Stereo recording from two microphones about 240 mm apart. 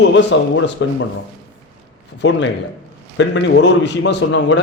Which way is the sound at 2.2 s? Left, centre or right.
Left.